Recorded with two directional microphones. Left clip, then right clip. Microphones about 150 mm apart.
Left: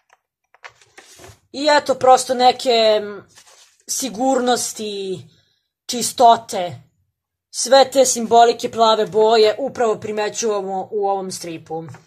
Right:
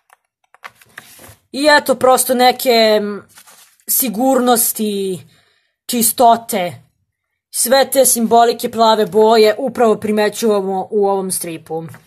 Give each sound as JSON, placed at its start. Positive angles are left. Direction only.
{"t": 0.1, "sound": "typing", "side_deg": -5}
{"t": 1.5, "sound": "speech", "side_deg": -45}